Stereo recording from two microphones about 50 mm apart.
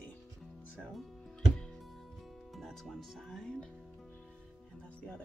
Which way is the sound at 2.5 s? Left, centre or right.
Centre.